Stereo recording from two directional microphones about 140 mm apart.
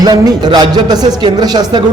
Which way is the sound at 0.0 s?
25° right (ahead or behind).